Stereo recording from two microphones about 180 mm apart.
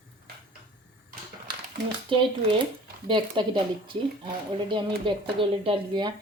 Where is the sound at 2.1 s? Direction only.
30° right (ahead or behind).